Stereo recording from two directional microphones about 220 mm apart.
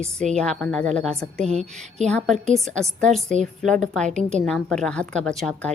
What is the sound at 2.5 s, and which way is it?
Speech, centre (ahead or behind).